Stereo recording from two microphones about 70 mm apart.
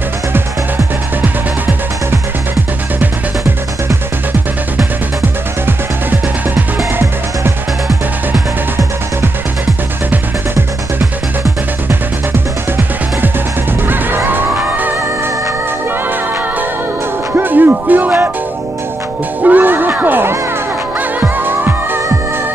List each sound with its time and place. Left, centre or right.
1.2 s music: right
5.7 s music: right
13.8 s music: right
17.4 s music: right
19.4 s music: right